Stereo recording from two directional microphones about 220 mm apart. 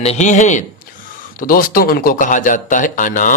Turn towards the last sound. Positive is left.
turn(degrees=35)  # may be behind; listen again after turning